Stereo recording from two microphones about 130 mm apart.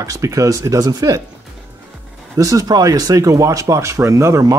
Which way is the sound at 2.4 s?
25° right (ahead or behind).